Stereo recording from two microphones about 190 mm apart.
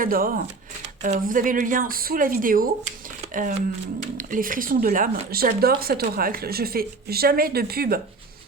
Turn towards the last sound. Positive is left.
turn(degrees=-55)  # may be behind; listen again after turning